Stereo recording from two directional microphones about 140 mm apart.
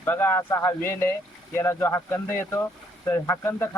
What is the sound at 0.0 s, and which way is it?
Speech, 15° left (ahead or behind).